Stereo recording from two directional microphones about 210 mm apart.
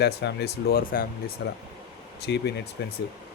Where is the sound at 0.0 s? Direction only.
50° left (ahead or behind).